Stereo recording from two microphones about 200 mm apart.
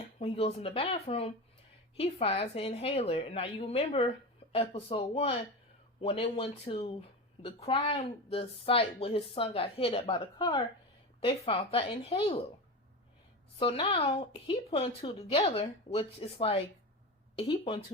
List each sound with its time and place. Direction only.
0.2 s a woman's voice: 30° left (ahead or behind)
13.6 s a woman's voice: 30° left (ahead or behind)